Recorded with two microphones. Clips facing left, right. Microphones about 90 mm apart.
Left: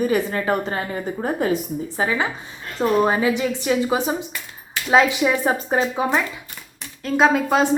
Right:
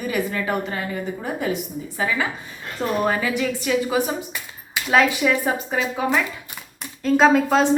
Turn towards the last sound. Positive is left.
turn(degrees=10)  # may be behind; listen again after turning